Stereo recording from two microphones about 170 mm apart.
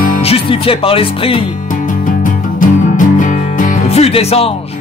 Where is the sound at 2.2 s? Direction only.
50° left (ahead or behind).